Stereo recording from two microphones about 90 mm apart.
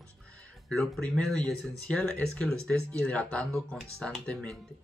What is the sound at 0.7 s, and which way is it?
Speech, 5° left (ahead or behind).